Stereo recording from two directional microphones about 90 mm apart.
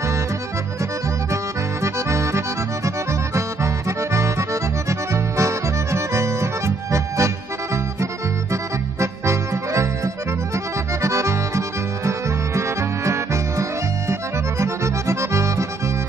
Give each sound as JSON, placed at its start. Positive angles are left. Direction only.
{"t": 1.3, "sound": "accordion", "side_deg": -35}
{"t": 9.0, "sound": "accordion", "side_deg": -30}